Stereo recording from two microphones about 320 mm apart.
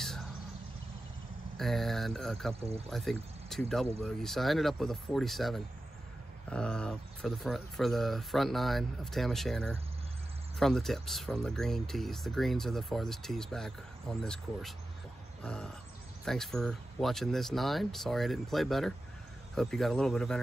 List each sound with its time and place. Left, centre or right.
1.6 s speech: centre